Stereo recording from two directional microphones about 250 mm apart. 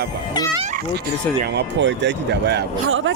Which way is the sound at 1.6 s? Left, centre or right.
Right.